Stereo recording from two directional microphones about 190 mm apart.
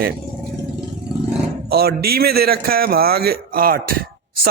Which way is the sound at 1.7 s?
55° right (ahead or behind).